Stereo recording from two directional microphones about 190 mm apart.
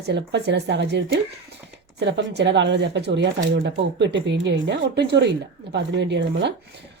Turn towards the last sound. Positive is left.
turn(degrees=-65)  # may be behind; listen again after turning